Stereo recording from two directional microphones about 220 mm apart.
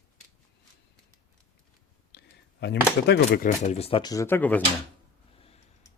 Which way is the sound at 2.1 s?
45° left (ahead or behind).